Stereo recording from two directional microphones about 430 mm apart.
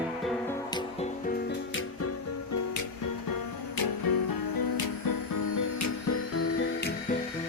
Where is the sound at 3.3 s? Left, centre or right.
Left.